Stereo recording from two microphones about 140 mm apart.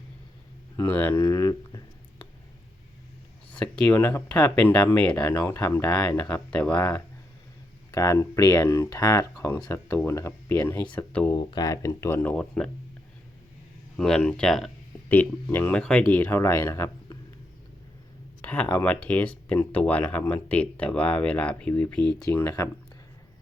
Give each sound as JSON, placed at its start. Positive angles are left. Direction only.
{"t": 0.8, "sound": "speech", "side_deg": 15}
{"t": 1.2, "sound": "a sound", "side_deg": 25}
{"t": 3.5, "sound": "a sound", "side_deg": 10}
{"t": 3.9, "sound": "speech", "side_deg": 20}
{"t": 5.1, "sound": "speech", "side_deg": 25}
{"t": 6.0, "sound": "speech", "side_deg": 15}
{"t": 11.3, "sound": "speech", "side_deg": 25}
{"t": 13.9, "sound": "speech", "side_deg": 5}
{"t": 15.4, "sound": "speech", "side_deg": 15}
{"t": 18.4, "sound": "speech", "side_deg": 10}
{"t": 22.3, "sound": "speech", "side_deg": 20}